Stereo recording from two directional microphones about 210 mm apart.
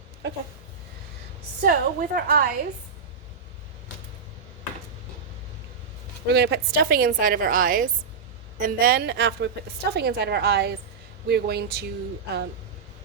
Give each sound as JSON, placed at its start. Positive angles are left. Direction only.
{"t": 1.6, "sound": "a woman's voice", "side_deg": -45}
{"t": 6.2, "sound": "a woman's voice", "side_deg": -55}